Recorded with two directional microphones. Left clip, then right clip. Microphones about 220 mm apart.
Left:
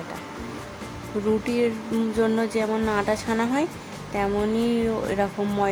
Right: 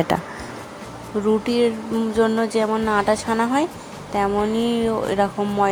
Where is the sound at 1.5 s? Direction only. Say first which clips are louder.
Right 4 dB; 15° right (ahead or behind).